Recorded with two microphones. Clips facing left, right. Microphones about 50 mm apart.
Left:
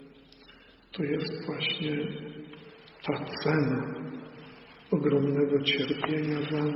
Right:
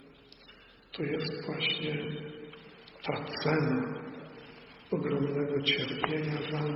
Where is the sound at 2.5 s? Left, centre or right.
Left.